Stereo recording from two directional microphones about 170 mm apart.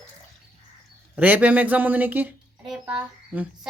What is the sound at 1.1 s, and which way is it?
A child's voice, 10° right (ahead or behind).